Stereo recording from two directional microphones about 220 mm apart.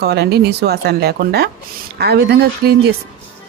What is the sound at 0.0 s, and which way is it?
Speech, 45° right (ahead or behind).